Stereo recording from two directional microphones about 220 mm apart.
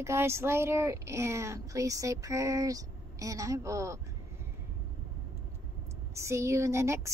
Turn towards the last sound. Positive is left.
turn(degrees=-10)  # may be behind; listen again after turning